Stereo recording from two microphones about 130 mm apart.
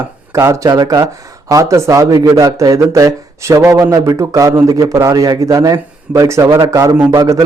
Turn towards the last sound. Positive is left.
turn(degrees=-25)  # may be behind; listen again after turning